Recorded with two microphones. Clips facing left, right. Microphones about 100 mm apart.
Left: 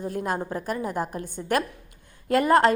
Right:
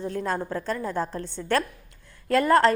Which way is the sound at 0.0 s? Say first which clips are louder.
Even; 15° left (ahead or behind).